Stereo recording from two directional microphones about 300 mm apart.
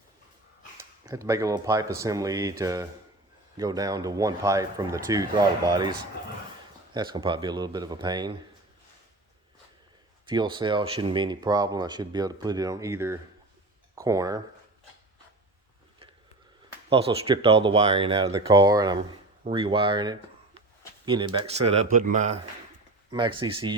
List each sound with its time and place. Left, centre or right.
0.8 s speech: centre
10.2 s speech: centre
16.9 s speech: centre